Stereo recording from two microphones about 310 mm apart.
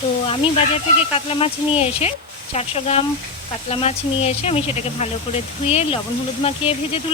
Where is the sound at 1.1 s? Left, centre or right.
Centre.